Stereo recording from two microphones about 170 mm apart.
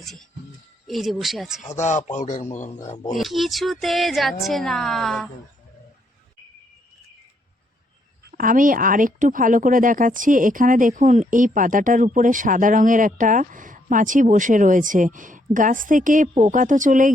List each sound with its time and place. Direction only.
0.0 s speech: centre (ahead or behind)
1.6 s speech: 45° left (ahead or behind)
3.2 s speech: centre (ahead or behind)
8.3 s speech: 55° right (ahead or behind)